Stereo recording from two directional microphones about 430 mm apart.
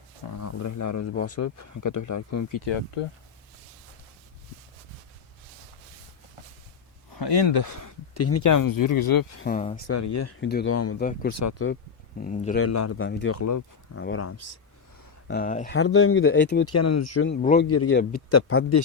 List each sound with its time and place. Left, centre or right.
0.3 s speech: left
7.1 s speech: left
9.4 s speech: centre
9.9 s speech: left
10.4 s speech: left
11.3 s speech: left
12.2 s speech: centre
12.6 s speech: left
13.0 s speech: left
13.3 s speech: left
14.0 s speech: left
15.3 s speech: centre
17.7 s speech: left